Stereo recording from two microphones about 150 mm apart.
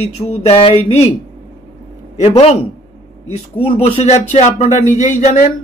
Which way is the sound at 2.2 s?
45° left (ahead or behind).